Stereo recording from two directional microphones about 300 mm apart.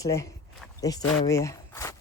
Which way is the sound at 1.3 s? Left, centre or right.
Centre.